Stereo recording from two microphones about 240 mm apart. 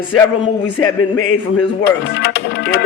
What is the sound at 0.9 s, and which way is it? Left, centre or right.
Speech, left.